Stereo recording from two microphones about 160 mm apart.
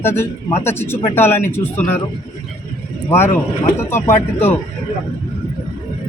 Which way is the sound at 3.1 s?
15° left (ahead or behind).